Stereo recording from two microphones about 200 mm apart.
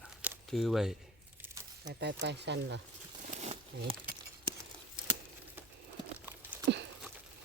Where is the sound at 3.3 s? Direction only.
30° right (ahead or behind).